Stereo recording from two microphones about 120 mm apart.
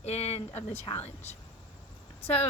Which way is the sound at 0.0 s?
65° left (ahead or behind).